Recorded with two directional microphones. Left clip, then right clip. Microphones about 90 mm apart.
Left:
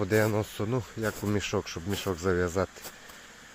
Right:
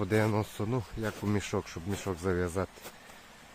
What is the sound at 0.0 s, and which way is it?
Speech, 10° right (ahead or behind).